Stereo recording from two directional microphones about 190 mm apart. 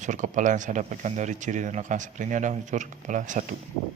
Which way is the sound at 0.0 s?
40° right (ahead or behind).